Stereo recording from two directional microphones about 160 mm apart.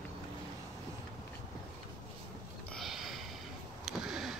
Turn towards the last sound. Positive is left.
turn(degrees=-5)  # may be behind; listen again after turning